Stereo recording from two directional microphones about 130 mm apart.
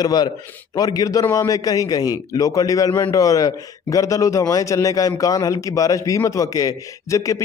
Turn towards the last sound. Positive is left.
turn(degrees=25)  # may be behind; listen again after turning